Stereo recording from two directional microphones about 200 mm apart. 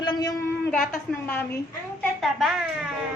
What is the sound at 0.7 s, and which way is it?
A woman's voice, 5° left (ahead or behind).